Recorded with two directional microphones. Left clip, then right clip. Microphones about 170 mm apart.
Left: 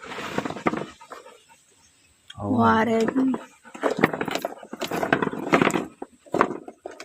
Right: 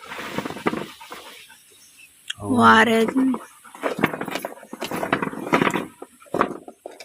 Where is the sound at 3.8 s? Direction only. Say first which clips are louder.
Left 1 dB; 25° left (ahead or behind).